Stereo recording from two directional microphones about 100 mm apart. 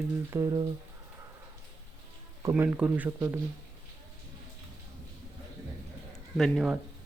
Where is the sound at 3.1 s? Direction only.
25° right (ahead or behind).